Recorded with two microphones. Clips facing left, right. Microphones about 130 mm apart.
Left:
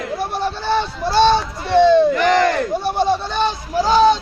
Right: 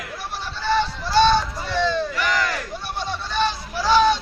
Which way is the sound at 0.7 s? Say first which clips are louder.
Even; 55° left (ahead or behind).